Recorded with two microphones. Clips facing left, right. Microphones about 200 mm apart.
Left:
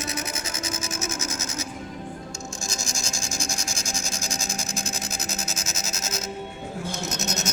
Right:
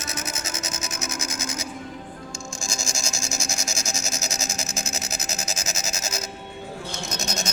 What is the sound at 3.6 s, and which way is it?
Rub, 80° right.